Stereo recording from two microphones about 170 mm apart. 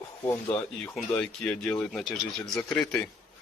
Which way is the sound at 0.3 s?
15° left (ahead or behind).